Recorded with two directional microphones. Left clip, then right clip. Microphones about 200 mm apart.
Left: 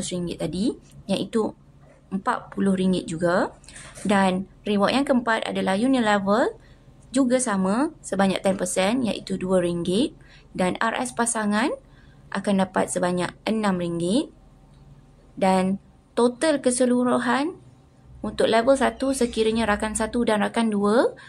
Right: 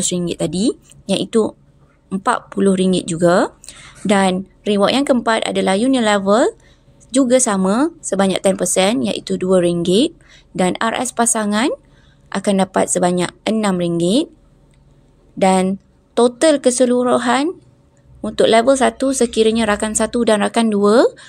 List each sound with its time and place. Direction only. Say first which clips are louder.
0.0 s a woman's voice: right 9 dB; 35° right (ahead or behind)
15.3 s speech: right 7 dB; 30° right (ahead or behind)